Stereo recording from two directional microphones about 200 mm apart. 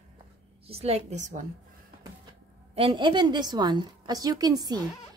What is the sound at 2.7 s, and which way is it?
A woman's voice, 25° right (ahead or behind).